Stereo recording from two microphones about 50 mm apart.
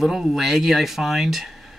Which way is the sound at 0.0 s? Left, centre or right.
Centre.